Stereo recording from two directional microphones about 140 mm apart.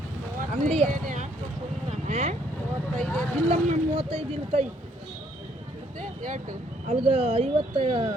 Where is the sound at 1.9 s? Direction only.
50° right (ahead or behind).